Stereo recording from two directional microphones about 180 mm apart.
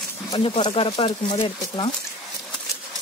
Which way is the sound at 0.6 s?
30° left (ahead or behind).